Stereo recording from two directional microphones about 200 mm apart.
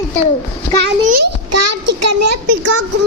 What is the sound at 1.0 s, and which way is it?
Speech, 45° right (ahead or behind).